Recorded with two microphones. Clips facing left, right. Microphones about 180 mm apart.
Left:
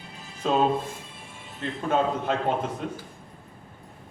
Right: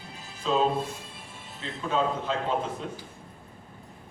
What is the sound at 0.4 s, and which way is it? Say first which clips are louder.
Speech: left 2 dB; 55° left (ahead or behind).